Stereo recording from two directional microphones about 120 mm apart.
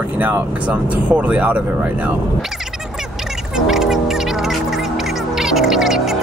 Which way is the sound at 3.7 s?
5° right (ahead or behind).